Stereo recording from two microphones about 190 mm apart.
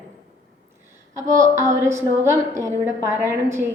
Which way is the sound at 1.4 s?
15° right (ahead or behind).